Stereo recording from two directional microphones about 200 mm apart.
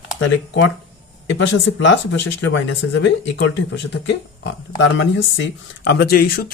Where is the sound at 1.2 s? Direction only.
65° left (ahead or behind).